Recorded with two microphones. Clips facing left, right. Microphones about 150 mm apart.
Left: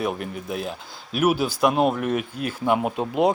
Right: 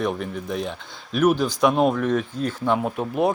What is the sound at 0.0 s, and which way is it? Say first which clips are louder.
Speech: right 1 dB; 5° left (ahead or behind).